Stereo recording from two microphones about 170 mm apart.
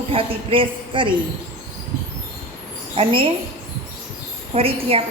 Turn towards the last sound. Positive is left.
turn(degrees=-35)  # may be behind; listen again after turning